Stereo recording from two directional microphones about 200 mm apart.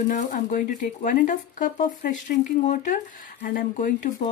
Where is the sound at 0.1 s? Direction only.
40° left (ahead or behind).